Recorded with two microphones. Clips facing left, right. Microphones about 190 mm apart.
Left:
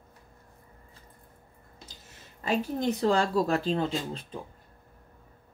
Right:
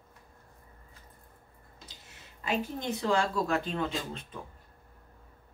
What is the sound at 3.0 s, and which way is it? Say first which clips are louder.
Speech: left 3 dB; 35° left (ahead or behind).